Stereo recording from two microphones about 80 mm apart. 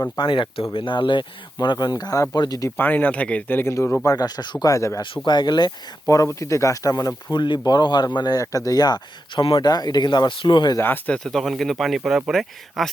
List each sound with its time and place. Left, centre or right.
0.2 s speech: left
1.6 s speech: left
2.7 s speech: left
3.6 s speech: left
5.0 s speech: left
6.1 s speech: left
7.3 s speech: left
9.6 s speech: left
10.8 s speech: left
11.1 s speech: centre